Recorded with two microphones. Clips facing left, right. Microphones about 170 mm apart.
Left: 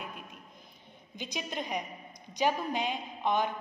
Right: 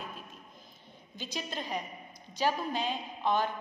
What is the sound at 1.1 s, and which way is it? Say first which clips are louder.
A woman's voice: left 1 dB; 15° left (ahead or behind).